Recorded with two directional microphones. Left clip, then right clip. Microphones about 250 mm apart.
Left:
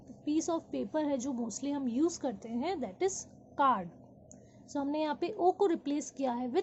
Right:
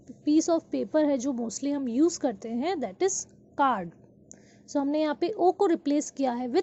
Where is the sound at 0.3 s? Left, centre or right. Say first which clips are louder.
Right 9 dB; right.